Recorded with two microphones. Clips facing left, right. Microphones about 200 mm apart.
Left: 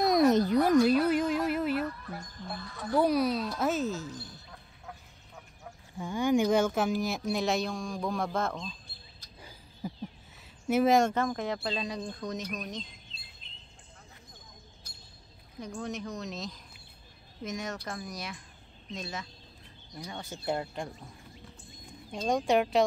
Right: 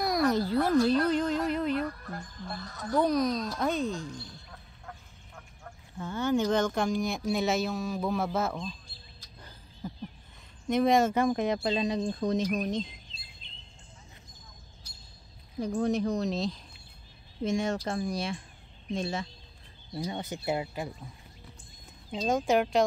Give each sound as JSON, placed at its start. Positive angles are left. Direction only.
{"t": 0.0, "sound": "speech", "side_deg": 20}
{"t": 2.6, "sound": "speech", "side_deg": -40}
{"t": 3.0, "sound": "speech", "side_deg": 10}
{"t": 9.4, "sound": "a sound", "side_deg": 10}
{"t": 10.7, "sound": "speech", "side_deg": 5}
{"t": 11.1, "sound": "speech", "side_deg": -15}
{"t": 13.4, "sound": "chirp", "side_deg": 5}
{"t": 15.6, "sound": "speech", "side_deg": -35}
{"t": 20.3, "sound": "speech", "side_deg": -5}
{"t": 22.1, "sound": "speech", "side_deg": 0}